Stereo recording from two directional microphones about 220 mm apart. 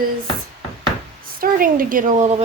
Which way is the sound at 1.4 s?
40° right (ahead or behind).